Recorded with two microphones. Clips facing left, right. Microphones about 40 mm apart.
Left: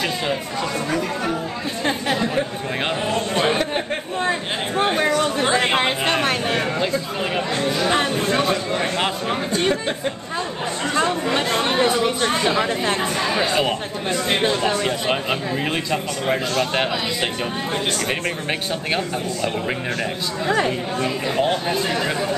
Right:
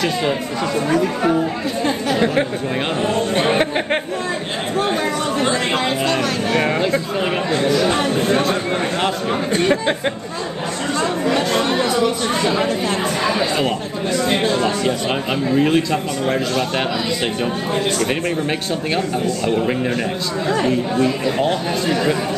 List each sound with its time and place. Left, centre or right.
0.2 s speech: centre
3.3 s speech: right
4.3 s a sound: left
5.4 s chatter: left
5.8 s speech: left
7.2 s speech: centre
7.7 s a man's voice: centre
11.0 s chatter: left
12.4 s speech: left
13.3 s a man's voice: centre
14.8 s a man's voice: centre
18.5 s a man's voice: centre
21.3 s a man's voice: centre